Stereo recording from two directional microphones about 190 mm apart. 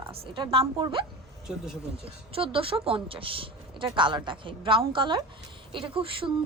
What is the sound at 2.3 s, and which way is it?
A woman's voice, 30° right (ahead or behind).